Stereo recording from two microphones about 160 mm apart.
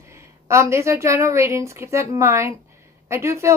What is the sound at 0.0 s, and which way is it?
A woman's voice, 20° right (ahead or behind).